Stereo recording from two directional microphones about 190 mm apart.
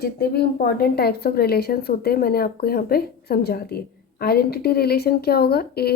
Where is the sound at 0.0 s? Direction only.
55° left (ahead or behind).